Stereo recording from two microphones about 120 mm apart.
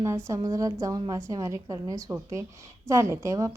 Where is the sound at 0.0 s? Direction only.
25° right (ahead or behind).